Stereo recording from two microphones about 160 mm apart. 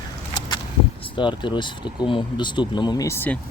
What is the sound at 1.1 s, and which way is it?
Speech, 30° left (ahead or behind).